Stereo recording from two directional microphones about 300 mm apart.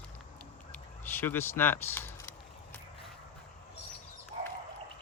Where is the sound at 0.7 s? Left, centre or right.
Centre.